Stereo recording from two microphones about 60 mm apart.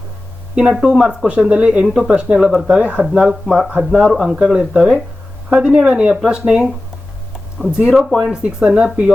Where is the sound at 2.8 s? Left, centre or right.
Right.